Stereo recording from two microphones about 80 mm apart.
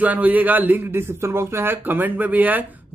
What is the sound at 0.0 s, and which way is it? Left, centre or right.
Speech, centre.